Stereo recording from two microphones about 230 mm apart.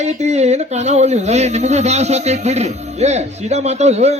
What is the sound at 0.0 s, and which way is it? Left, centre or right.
A man's voice, right.